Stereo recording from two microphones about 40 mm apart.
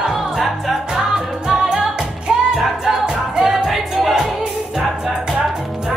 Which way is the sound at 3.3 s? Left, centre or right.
Centre.